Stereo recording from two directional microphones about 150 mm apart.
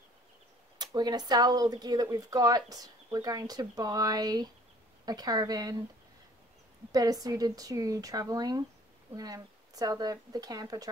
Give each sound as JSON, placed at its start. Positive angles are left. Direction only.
{"t": 0.7, "sound": "speech", "side_deg": -30}
{"t": 6.9, "sound": "speech", "side_deg": -25}